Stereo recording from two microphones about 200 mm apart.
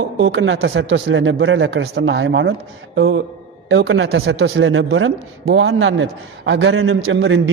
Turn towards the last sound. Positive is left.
turn(degrees=-70)  # may be behind; listen again after turning